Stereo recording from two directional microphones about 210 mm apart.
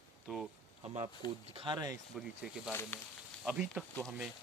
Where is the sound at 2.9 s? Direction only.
10° left (ahead or behind).